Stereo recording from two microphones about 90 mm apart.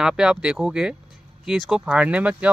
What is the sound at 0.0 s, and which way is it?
Speech, 10° right (ahead or behind).